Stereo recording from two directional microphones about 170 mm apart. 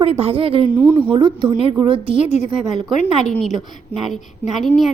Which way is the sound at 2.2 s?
40° left (ahead or behind).